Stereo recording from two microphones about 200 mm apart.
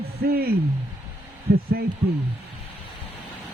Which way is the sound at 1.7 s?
50° right (ahead or behind).